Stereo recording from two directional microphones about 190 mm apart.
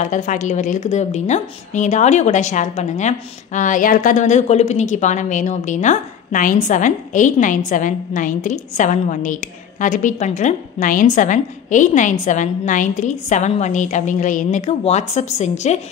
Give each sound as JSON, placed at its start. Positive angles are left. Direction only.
{"t": 0.0, "sound": "a woman's voice", "side_deg": 40}